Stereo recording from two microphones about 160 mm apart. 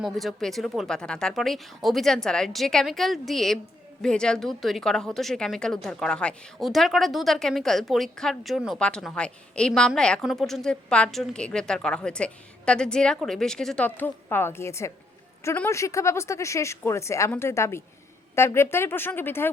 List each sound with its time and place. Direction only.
0.0 s a woman's voice: centre (ahead or behind)